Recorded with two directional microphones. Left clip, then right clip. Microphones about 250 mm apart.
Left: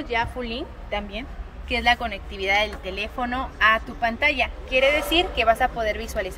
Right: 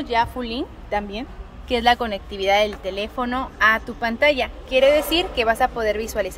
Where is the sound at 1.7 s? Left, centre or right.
Right.